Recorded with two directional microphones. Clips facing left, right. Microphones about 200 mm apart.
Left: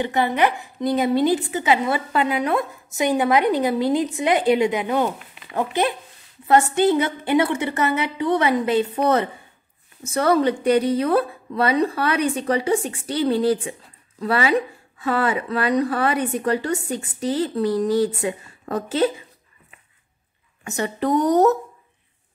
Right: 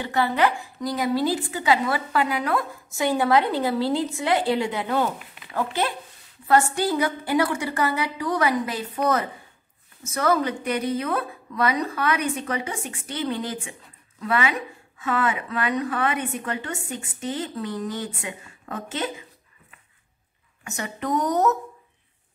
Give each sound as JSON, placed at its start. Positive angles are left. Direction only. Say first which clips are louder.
{"t": 0.0, "sound": "a woman's voice", "louder": "left 2 dB", "side_deg": 20}
{"t": 20.6, "sound": "speech", "louder": "left 7 dB", "side_deg": 35}